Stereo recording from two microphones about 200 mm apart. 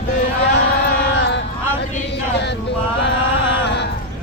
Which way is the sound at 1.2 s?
60° left (ahead or behind).